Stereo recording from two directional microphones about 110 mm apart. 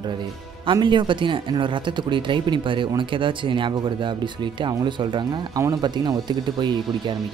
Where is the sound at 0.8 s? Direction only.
45° right (ahead or behind).